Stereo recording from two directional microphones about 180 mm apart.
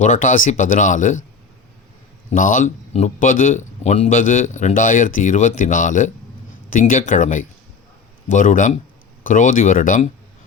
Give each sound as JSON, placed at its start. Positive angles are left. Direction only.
{"t": 0.0, "sound": "speech", "side_deg": 45}
{"t": 2.3, "sound": "speech", "side_deg": 45}